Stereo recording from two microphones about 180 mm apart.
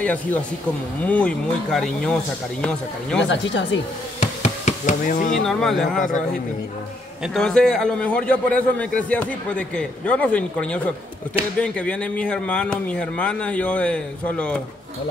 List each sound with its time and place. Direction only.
0.0 s a man's voice: 10° left (ahead or behind)
3.3 s speech: 90° left
4.2 s a sound: 40° left (ahead or behind)
5.4 s speech: centre (ahead or behind)
7.3 s a man's voice: 5° left (ahead or behind)